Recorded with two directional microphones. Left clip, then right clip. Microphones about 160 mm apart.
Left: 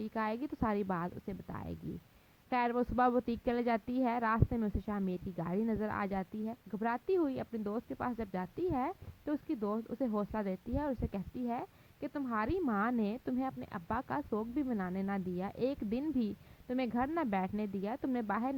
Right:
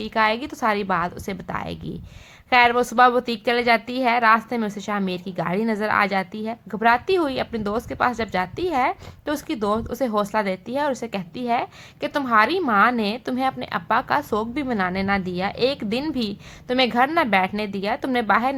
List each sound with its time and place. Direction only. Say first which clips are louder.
0.0 s a woman's voice: right 16 dB; 50° left (ahead or behind); by 6.8 s 30° left (ahead or behind)
6.8 s a woman's voice: right 15 dB; 45° left (ahead or behind)
9.6 s speech: right 15 dB; 15° left (ahead or behind)
10.2 s a woman's voice: right 16 dB; 45° left (ahead or behind)